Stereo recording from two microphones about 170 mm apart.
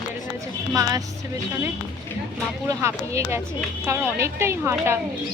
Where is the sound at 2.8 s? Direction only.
15° right (ahead or behind).